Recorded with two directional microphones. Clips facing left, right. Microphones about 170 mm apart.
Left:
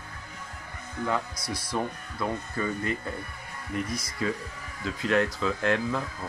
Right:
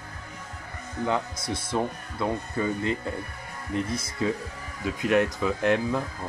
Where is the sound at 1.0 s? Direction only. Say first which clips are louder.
Right 2 dB; 25° right (ahead or behind).